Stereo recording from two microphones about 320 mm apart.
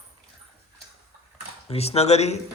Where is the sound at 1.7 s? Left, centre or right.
Centre.